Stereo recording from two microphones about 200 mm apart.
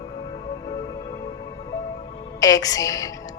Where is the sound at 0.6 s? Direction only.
20° left (ahead or behind).